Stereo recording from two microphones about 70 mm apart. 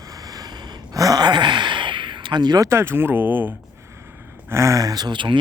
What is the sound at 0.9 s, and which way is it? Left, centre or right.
Speech, right.